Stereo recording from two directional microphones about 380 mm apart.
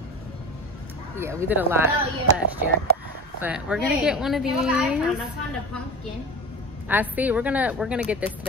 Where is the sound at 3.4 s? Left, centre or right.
Centre.